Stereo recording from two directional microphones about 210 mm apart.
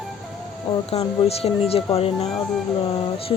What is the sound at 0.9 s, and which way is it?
Speech, 30° left (ahead or behind).